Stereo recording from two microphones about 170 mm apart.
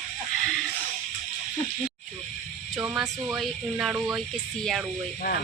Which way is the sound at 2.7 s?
20° right (ahead or behind).